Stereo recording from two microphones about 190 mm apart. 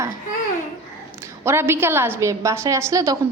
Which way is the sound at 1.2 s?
15° right (ahead or behind).